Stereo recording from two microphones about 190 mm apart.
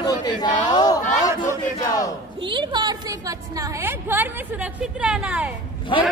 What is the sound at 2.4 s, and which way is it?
A woman's voice, 25° right (ahead or behind).